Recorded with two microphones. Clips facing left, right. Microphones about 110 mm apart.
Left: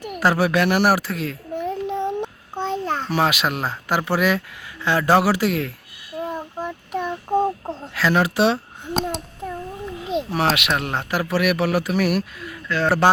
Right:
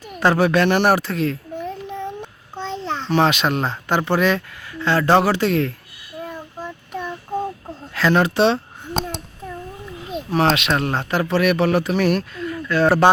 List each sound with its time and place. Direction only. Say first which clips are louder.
0.2 s speech: right 2 dB; 5° left (ahead or behind)
1.5 s a sound: left 4 dB; 15° left (ahead or behind)
6.2 s child singing: left 4 dB; 20° left (ahead or behind)
7.9 s a sound: right 2 dB; 5° left (ahead or behind)
10.3 s speech: right 5 dB; 5° left (ahead or behind)
12.6 s speech: right 4 dB; 15° right (ahead or behind)